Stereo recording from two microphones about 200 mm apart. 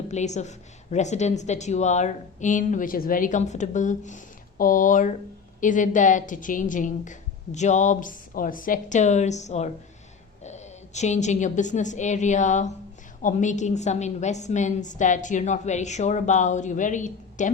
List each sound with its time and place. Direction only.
0.1 s a woman's voice: 35° left (ahead or behind)